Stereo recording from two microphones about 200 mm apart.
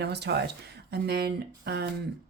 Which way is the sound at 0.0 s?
55° right (ahead or behind).